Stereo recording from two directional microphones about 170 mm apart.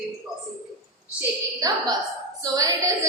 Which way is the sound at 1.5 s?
20° right (ahead or behind).